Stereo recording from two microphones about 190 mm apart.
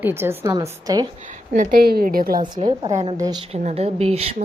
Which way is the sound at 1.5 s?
50° right (ahead or behind).